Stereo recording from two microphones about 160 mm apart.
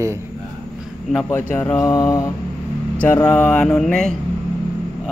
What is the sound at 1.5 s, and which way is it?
Mantra, 10° left (ahead or behind).